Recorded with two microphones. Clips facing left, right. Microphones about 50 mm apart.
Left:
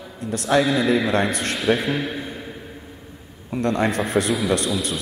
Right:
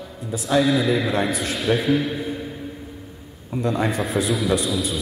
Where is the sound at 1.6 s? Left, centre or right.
Centre.